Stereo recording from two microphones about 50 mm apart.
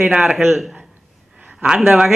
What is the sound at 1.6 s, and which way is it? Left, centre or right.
Speech, centre.